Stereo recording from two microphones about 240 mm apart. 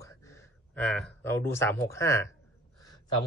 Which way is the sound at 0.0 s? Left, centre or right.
Centre.